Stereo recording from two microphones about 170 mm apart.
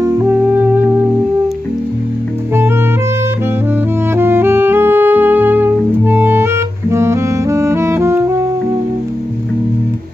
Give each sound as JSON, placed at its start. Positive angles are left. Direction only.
{"t": 0.0, "sound": "music", "side_deg": -10}
{"t": 4.1, "sound": "music", "side_deg": -15}